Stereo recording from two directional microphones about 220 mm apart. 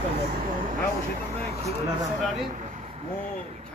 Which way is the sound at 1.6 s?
15° right (ahead or behind).